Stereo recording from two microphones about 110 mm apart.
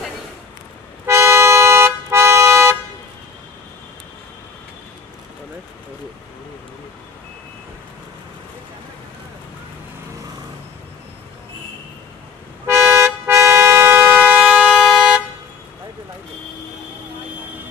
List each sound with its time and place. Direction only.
1.0 s vehicle horn: 25° right (ahead or behind)
12.6 s vehicle horn: 25° right (ahead or behind); by 15.2 s 5° right (ahead or behind)